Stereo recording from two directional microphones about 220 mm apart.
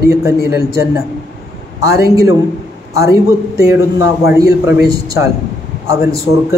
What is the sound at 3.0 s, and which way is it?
A man's voice, 15° right (ahead or behind).